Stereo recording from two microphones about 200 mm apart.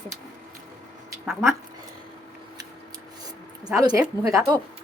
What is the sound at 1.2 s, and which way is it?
Speech, centre (ahead or behind).